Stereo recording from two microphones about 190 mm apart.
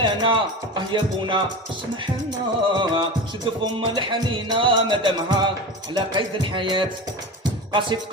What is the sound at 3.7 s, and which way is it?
Music, 25° right (ahead or behind).